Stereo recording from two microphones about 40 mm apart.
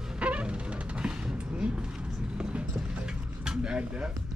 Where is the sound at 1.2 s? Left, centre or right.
Right.